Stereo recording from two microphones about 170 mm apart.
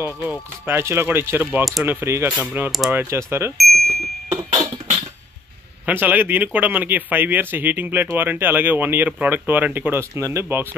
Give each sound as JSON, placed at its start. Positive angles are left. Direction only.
{"t": 0.0, "sound": "speech", "side_deg": -10}
{"t": 1.6, "sound": "speech", "side_deg": 0}
{"t": 1.9, "sound": "speech", "side_deg": -15}
{"t": 3.5, "sound": "bicycle bell", "side_deg": 0}
{"t": 4.3, "sound": "music", "side_deg": -30}
{"t": 5.9, "sound": "speech", "side_deg": -10}